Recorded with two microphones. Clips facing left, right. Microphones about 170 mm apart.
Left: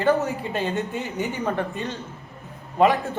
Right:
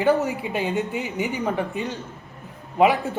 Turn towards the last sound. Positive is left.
turn(degrees=-15)  # may be behind; listen again after turning